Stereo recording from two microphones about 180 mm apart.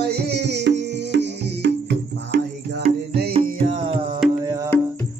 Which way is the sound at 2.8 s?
60° right (ahead or behind).